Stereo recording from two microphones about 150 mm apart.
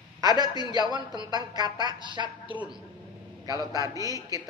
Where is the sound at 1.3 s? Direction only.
25° right (ahead or behind).